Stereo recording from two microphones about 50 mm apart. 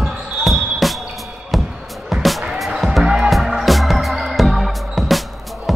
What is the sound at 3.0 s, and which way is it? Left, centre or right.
Music, centre.